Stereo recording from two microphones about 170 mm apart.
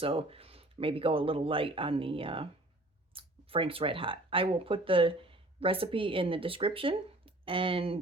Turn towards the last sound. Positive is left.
turn(degrees=-30)  # may be behind; listen again after turning